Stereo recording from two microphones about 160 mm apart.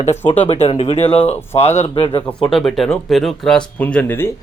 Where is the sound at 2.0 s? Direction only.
30° left (ahead or behind).